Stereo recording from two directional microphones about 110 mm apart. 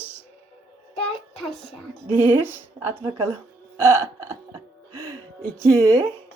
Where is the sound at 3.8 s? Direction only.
25° right (ahead or behind).